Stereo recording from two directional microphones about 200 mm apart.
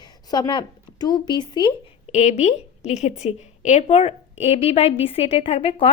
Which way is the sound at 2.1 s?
35° left (ahead or behind).